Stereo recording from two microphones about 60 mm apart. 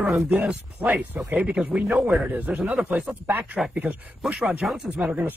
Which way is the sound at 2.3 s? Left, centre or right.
Right.